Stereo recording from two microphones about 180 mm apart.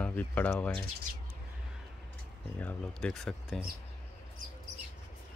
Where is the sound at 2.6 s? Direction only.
10° left (ahead or behind).